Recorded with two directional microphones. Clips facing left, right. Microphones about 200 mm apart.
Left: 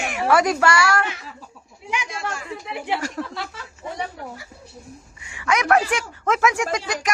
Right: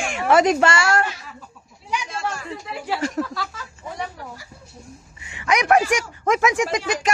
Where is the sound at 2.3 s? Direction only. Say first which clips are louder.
Even; 20° left (ahead or behind).